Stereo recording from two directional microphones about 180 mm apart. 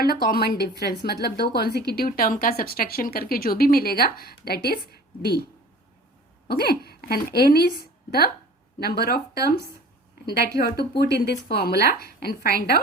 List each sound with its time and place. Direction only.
0.0 s a woman's voice: 60° left (ahead or behind)
6.5 s a woman's voice: 60° left (ahead or behind)
8.8 s a woman's voice: 60° left (ahead or behind)